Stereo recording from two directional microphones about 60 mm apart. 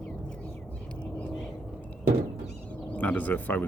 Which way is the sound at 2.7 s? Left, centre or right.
Left.